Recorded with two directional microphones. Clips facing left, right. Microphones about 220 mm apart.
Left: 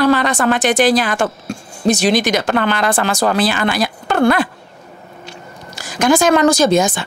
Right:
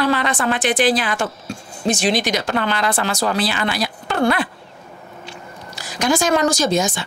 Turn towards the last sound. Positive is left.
turn(degrees=55)  # may be behind; listen again after turning